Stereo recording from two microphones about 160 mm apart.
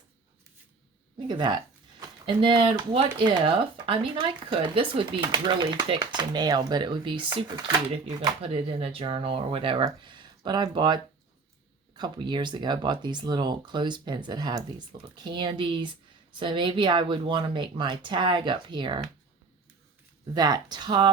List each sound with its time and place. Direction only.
1.3 s speech: 25° right (ahead or behind)
20.3 s speech: 25° right (ahead or behind)